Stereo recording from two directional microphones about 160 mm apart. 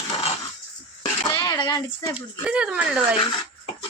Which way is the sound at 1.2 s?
25° left (ahead or behind).